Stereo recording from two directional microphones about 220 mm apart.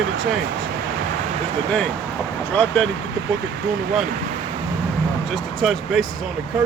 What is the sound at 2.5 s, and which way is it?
Speech, 5° left (ahead or behind).